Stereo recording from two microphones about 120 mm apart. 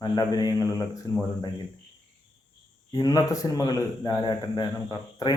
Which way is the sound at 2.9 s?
30° left (ahead or behind).